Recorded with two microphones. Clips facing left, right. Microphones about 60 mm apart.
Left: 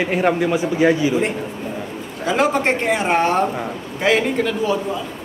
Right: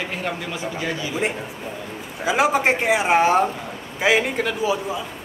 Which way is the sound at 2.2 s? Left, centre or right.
Centre.